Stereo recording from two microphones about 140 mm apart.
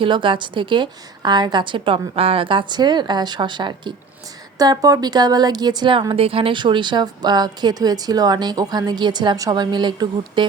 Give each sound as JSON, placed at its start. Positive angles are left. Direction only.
{"t": 0.0, "sound": "a woman's voice", "side_deg": -35}